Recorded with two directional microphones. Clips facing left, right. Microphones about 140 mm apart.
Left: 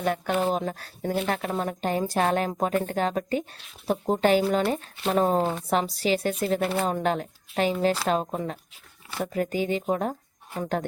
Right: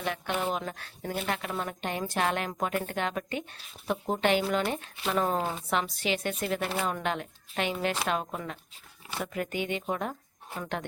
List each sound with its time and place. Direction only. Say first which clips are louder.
0.0 s speech: left 6 dB; 40° left (ahead or behind)